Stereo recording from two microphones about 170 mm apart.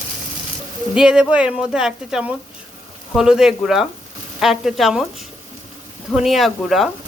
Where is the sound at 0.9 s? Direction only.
5° right (ahead or behind).